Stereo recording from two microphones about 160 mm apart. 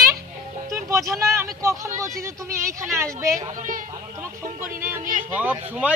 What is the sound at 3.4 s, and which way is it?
Speech, 55° right (ahead or behind).